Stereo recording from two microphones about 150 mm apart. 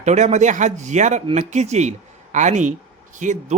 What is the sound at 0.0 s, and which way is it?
Speech, 50° right (ahead or behind).